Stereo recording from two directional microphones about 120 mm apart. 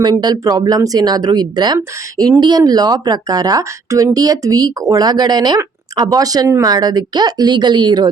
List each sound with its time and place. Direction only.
0.0 s speech: 35° right (ahead or behind)